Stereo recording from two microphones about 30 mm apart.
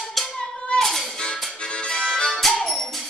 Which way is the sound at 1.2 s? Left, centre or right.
Left.